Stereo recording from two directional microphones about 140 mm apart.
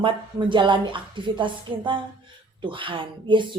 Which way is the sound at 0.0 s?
35° right (ahead or behind).